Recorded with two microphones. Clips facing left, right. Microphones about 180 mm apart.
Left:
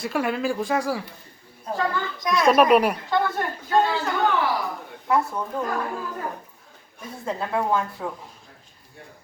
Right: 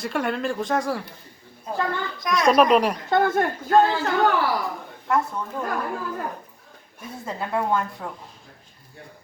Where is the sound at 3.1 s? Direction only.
50° right (ahead or behind).